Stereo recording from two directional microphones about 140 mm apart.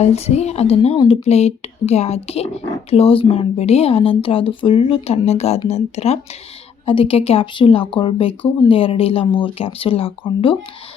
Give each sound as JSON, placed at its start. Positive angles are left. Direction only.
{"t": 0.0, "sound": "speech", "side_deg": 50}